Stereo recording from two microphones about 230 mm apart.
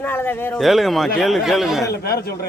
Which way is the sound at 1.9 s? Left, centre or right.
Left.